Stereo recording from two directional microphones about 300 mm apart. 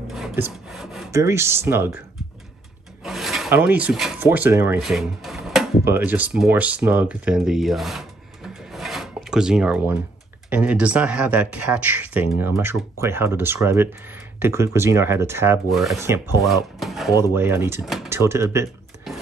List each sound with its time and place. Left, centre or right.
0.1 s speech: centre
3.0 s speech: centre